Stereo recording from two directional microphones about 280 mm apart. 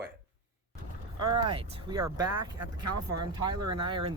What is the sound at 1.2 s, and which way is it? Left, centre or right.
Speech, centre.